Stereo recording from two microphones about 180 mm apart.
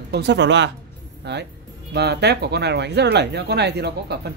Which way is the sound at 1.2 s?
70° right (ahead or behind).